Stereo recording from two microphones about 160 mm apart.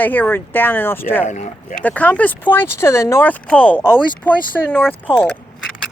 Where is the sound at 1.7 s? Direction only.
10° left (ahead or behind).